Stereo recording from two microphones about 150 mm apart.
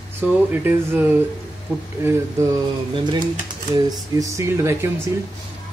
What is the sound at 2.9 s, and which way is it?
Speech, 30° right (ahead or behind).